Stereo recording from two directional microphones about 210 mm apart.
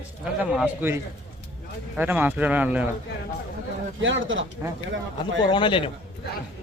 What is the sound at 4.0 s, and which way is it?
Speech, 65° right (ahead or behind).